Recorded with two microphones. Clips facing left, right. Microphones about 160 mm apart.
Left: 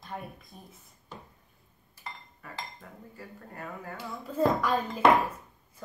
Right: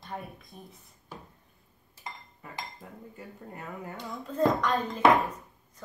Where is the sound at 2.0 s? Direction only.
15° right (ahead or behind).